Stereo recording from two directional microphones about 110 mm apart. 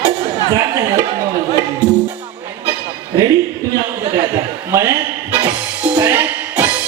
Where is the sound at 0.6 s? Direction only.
35° right (ahead or behind).